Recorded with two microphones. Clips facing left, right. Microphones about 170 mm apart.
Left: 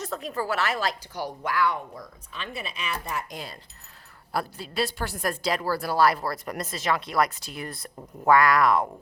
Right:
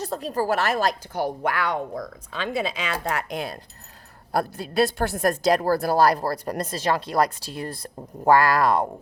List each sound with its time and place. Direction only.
0.0 s speech: 35° right (ahead or behind); by 3.6 s 60° right (ahead or behind)
4.3 s a woman's voice: 45° right (ahead or behind)